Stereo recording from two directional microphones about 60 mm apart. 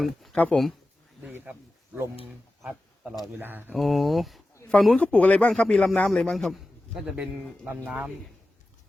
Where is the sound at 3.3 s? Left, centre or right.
Right.